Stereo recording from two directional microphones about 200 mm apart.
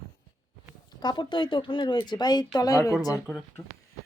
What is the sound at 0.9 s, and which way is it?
Speech, 20° left (ahead or behind).